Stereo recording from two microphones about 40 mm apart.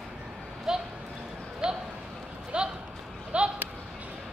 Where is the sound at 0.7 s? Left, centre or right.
Centre.